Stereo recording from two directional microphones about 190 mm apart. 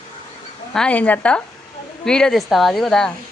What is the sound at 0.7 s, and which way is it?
Speech, 5° left (ahead or behind).